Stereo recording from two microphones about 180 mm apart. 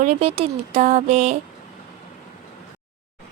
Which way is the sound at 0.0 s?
40° right (ahead or behind).